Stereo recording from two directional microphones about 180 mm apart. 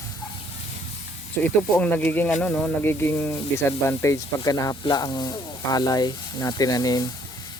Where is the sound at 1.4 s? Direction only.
10° left (ahead or behind).